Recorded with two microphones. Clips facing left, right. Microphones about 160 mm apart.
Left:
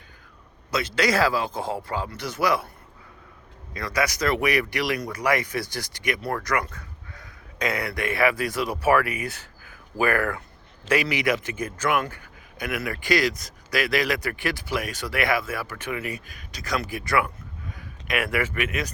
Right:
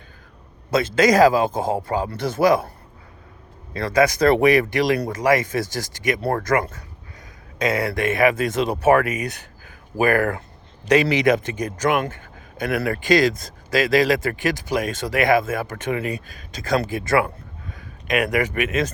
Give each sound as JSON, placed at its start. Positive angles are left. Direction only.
{"t": 0.7, "sound": "speech", "side_deg": -50}
{"t": 3.8, "sound": "speech", "side_deg": -30}
{"t": 5.6, "sound": "speech", "side_deg": -45}
{"t": 6.5, "sound": "speech", "side_deg": -30}
{"t": 10.2, "sound": "speech", "side_deg": -30}
{"t": 13.0, "sound": "speech", "side_deg": -20}